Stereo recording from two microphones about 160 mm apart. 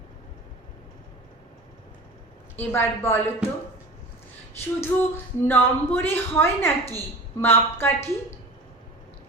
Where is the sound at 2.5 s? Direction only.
15° left (ahead or behind).